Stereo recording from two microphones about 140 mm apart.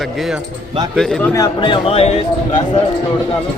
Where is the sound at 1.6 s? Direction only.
40° left (ahead or behind).